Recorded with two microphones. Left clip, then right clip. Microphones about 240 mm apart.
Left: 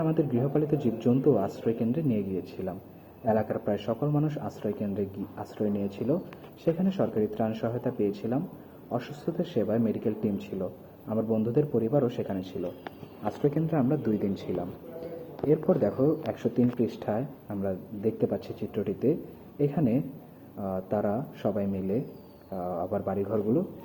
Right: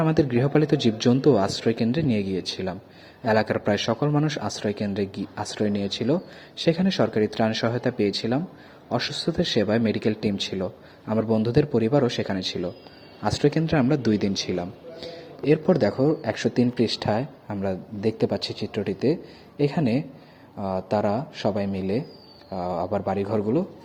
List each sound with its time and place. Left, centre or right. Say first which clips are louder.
0.0 s a man's voice: right 6 dB; right